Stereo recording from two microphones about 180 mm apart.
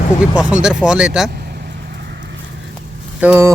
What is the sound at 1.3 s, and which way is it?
Vehicle, 60° right (ahead or behind).